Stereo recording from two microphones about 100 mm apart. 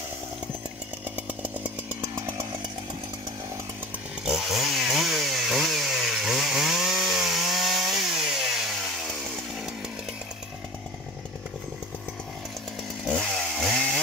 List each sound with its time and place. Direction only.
1.1 s chainsaw: 15° right (ahead or behind)
4.2 s chainsaw: 5° right (ahead or behind)
13.2 s chainsaw: centre (ahead or behind)